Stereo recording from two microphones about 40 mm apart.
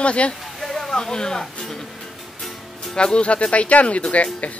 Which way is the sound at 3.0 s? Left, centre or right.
Left.